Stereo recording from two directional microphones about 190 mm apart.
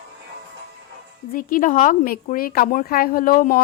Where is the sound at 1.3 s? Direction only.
45° left (ahead or behind).